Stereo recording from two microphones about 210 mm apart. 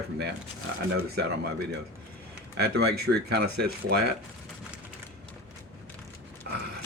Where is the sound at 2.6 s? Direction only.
50° right (ahead or behind).